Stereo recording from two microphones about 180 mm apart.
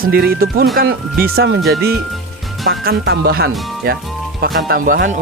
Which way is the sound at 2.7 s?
60° right (ahead or behind).